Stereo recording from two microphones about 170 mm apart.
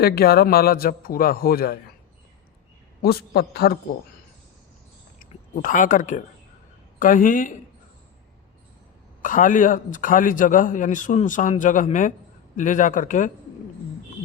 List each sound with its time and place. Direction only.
0.0 s a man's voice: 65° left (ahead or behind)
3.0 s a man's voice: 65° left (ahead or behind)
5.5 s a man's voice: 50° left (ahead or behind)
9.2 s a man's voice: 50° left (ahead or behind)